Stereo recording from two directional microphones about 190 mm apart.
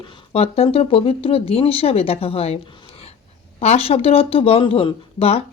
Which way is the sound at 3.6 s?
30° left (ahead or behind).